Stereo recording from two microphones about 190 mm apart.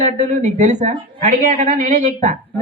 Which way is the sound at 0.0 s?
40° right (ahead or behind).